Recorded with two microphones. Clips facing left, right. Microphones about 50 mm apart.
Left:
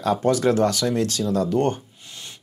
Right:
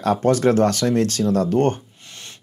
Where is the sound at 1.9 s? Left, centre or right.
Right.